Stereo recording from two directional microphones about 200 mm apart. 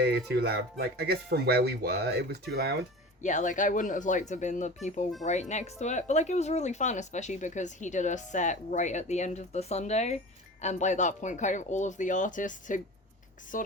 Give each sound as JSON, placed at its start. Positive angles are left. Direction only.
{"t": 0.0, "sound": "speech", "side_deg": -50}
{"t": 3.2, "sound": "speech", "side_deg": 40}